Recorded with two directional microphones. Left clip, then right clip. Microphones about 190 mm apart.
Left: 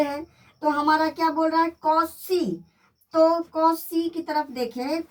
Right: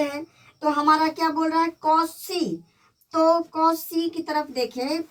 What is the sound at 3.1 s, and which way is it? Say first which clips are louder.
Child singing: left 1 dB; 20° right (ahead or behind).